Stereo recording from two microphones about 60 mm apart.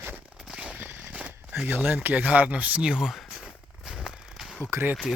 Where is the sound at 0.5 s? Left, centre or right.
Centre.